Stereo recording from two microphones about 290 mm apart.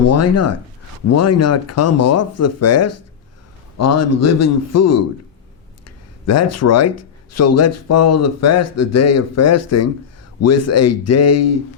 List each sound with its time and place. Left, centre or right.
0.0 s speech: left
6.2 s speech: left